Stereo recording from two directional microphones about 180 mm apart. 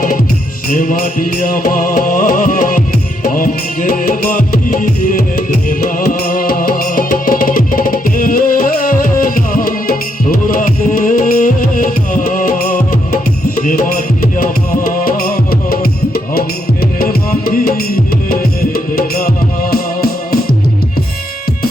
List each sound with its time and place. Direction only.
0.7 s music: 45° left (ahead or behind)
6.1 s music: 50° left (ahead or behind)
13.6 s music: 45° left (ahead or behind)
15.0 s music: 55° left (ahead or behind)